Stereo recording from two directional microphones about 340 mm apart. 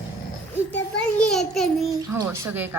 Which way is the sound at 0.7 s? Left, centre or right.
Centre.